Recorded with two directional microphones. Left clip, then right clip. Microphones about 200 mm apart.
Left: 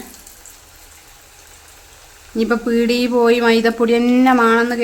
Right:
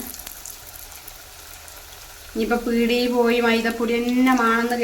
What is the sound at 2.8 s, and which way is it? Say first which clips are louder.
Speech: left 4 dB; 50° left (ahead or behind).